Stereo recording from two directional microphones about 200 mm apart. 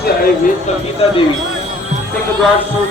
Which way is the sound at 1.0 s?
30° left (ahead or behind).